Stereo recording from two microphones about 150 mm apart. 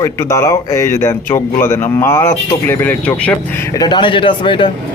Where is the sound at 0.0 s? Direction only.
20° left (ahead or behind).